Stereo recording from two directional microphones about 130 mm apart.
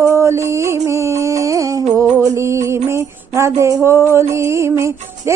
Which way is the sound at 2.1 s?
25° right (ahead or behind).